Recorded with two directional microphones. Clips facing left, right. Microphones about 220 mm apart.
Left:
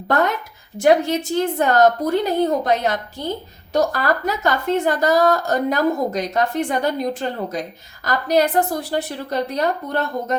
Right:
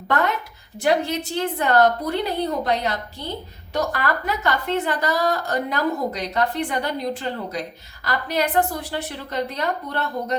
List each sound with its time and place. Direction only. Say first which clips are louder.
0.8 s a woman's voice: left 5 dB; 45° left (ahead or behind)